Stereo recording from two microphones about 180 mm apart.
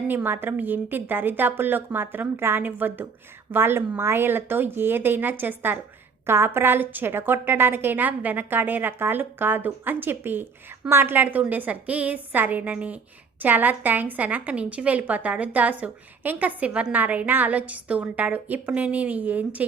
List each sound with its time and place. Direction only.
0.1 s a woman's voice: 10° right (ahead or behind)